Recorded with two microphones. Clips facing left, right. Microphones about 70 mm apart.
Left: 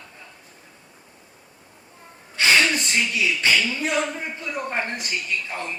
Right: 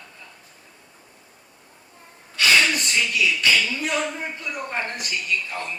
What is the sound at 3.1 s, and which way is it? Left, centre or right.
Speech, left.